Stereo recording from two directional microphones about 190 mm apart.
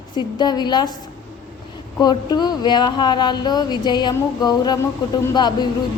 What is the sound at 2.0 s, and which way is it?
A woman's voice, 20° left (ahead or behind).